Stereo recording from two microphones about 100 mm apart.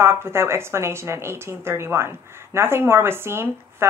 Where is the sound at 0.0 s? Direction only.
25° right (ahead or behind).